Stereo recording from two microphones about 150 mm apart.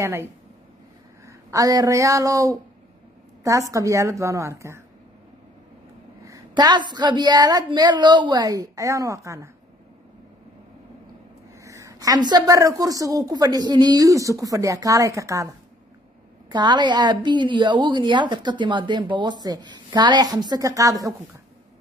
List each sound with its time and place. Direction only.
0.0 s a woman's voice: 15° right (ahead or behind)
6.2 s a woman's voice: 25° right (ahead or behind)
11.6 s a woman's voice: 20° right (ahead or behind)